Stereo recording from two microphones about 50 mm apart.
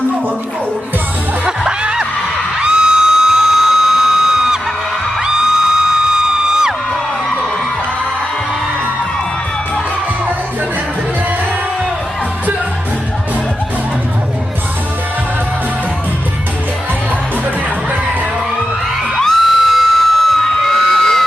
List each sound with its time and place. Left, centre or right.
1.5 s music: centre
2.6 s a sound: centre
5.2 s music: centre
19.1 s music: centre